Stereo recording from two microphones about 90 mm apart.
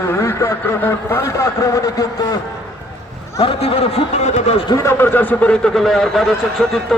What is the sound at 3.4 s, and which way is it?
Speech, 90° left.